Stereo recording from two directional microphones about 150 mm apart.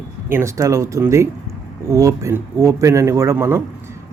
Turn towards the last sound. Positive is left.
turn(degrees=-15)  # may be behind; listen again after turning